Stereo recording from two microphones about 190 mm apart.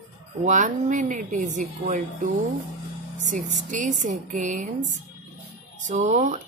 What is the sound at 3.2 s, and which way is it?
Speech, 40° right (ahead or behind).